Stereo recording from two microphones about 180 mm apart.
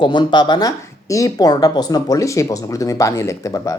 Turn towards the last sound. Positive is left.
turn(degrees=20)  # may be behind; listen again after turning